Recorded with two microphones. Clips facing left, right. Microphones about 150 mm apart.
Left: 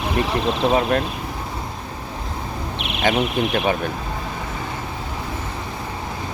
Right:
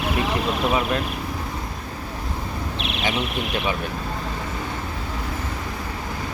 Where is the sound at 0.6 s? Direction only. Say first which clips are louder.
Left 5 dB; 30° left (ahead or behind).